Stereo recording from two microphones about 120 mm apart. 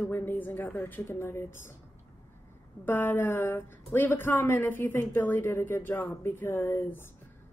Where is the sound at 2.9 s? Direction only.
20° left (ahead or behind).